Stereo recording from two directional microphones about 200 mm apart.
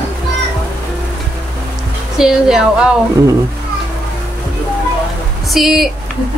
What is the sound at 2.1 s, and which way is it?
Speech, 5° right (ahead or behind).